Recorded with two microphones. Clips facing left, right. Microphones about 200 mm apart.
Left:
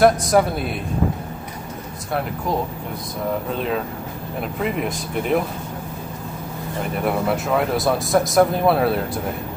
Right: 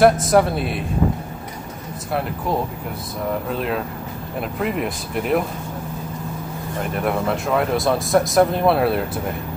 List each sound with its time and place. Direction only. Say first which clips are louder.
0.0 s speech: right 1 dB; centre (ahead or behind)
3.5 s speech: even; centre (ahead or behind)
7.1 s speech: left 1 dB; centre (ahead or behind)